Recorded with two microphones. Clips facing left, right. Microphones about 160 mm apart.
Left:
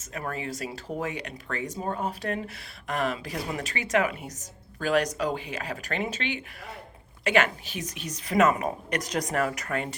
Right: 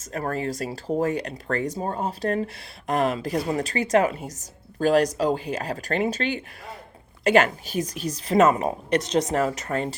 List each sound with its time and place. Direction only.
0.1 s a woman's voice: 40° right (ahead or behind)